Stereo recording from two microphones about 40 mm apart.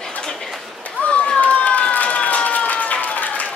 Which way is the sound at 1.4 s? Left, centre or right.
Left.